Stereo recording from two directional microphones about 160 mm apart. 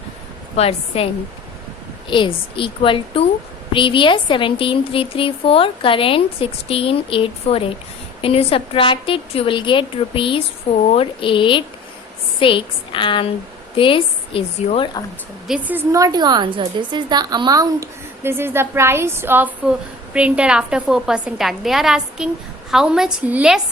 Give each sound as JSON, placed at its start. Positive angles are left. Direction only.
{"t": 0.5, "sound": "a woman's voice", "side_deg": 40}
{"t": 2.0, "sound": "a woman's voice", "side_deg": 30}
{"t": 15.4, "sound": "a woman's voice", "side_deg": -10}